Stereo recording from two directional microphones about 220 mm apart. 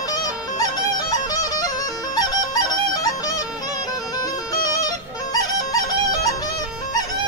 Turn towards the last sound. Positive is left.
turn(degrees=15)  # may be behind; listen again after turning